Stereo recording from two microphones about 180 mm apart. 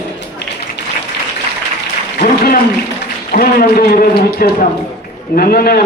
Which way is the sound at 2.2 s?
45° left (ahead or behind).